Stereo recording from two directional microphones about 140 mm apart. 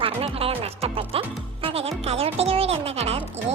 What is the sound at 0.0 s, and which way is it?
Music, 45° right (ahead or behind).